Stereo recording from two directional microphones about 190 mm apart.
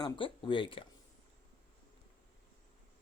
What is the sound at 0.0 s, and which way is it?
Speech, 25° left (ahead or behind).